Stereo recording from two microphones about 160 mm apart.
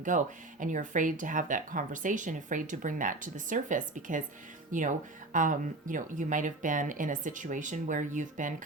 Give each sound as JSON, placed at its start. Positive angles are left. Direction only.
{"t": 0.1, "sound": "speech", "side_deg": -50}